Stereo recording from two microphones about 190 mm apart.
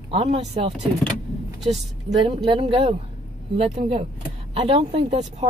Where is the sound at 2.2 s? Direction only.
30° right (ahead or behind).